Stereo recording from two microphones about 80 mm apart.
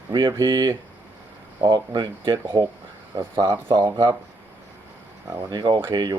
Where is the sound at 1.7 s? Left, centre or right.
Right.